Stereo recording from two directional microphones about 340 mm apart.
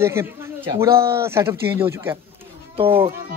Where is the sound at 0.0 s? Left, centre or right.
Centre.